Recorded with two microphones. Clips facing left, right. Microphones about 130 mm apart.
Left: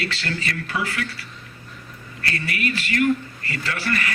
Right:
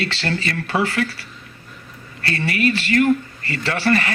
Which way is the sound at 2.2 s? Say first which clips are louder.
Right 6 dB; 30° right (ahead or behind).